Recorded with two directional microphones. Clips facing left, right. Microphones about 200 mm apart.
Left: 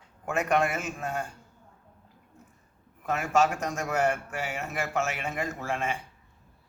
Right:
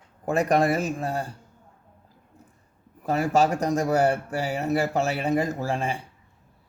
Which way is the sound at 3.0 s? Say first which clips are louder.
Right 4 dB; 35° right (ahead or behind).